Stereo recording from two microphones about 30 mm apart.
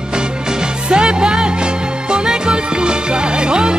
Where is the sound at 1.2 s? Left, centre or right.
Right.